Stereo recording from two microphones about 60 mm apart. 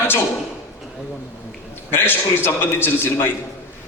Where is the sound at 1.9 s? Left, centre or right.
Left.